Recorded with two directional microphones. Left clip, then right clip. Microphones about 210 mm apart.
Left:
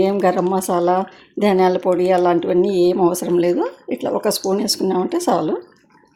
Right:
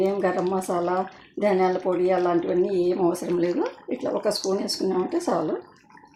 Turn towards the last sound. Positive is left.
turn(degrees=45)  # may be behind; listen again after turning